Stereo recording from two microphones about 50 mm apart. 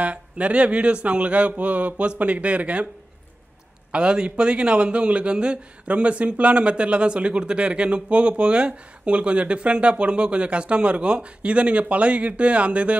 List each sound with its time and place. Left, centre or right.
0.0 s a man's voice: right
3.9 s a man's voice: centre